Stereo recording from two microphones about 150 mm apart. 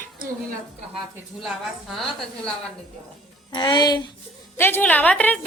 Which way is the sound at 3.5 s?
30° left (ahead or behind).